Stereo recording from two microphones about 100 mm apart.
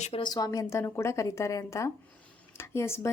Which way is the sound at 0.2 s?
40° left (ahead or behind).